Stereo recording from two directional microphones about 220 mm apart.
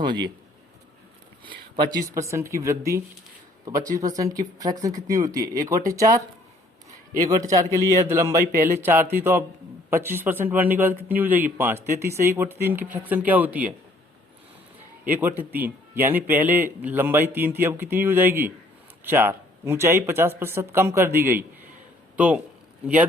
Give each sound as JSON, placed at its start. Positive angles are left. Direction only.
{"t": 0.0, "sound": "speech", "side_deg": -20}
{"t": 1.5, "sound": "speech", "side_deg": -20}
{"t": 15.5, "sound": "speech", "side_deg": -10}